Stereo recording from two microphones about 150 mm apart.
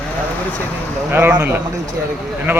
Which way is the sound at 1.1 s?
15° right (ahead or behind).